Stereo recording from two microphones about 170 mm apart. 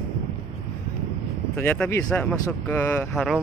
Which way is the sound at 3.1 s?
Centre (ahead or behind).